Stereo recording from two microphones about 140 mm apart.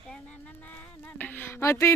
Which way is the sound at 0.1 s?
10° left (ahead or behind).